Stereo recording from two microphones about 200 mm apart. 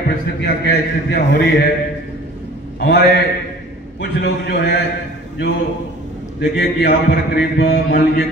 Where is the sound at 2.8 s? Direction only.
55° left (ahead or behind).